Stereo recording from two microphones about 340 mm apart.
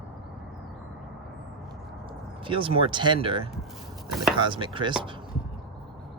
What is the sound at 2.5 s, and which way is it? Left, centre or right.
Speech, centre.